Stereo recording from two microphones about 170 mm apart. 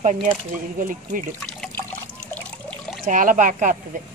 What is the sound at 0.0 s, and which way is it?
Speech, 45° right (ahead or behind).